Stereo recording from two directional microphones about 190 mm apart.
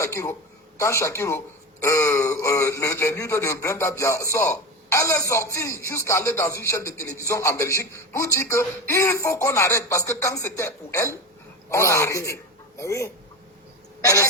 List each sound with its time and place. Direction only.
0.0 s a man's voice: 15° left (ahead or behind)